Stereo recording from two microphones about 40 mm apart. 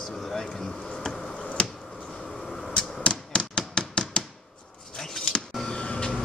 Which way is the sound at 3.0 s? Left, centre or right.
Left.